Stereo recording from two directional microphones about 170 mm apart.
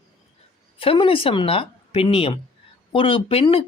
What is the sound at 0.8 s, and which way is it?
Speech, 30° left (ahead or behind).